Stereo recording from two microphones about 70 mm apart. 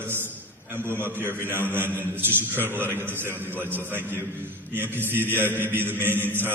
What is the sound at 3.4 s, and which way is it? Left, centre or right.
Mantra, right.